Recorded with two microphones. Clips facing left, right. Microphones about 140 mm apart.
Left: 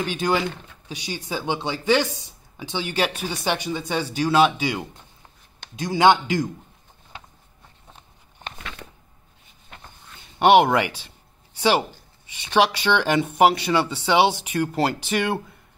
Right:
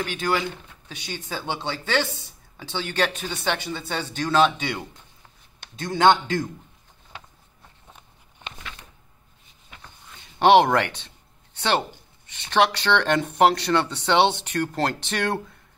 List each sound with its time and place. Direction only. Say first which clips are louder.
0.0 s speech: left 2 dB; 15° left (ahead or behind)
10.1 s a sound: even; centre (ahead or behind)
12.3 s speech: left 1 dB; 10° left (ahead or behind)